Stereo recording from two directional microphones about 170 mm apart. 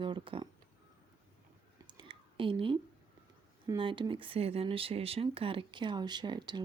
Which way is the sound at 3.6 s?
25° right (ahead or behind).